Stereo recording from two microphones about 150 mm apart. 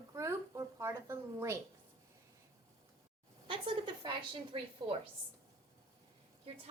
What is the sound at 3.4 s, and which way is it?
Speech, 35° right (ahead or behind).